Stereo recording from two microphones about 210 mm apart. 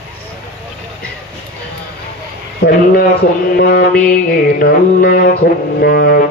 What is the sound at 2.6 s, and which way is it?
Mantra, 50° left (ahead or behind).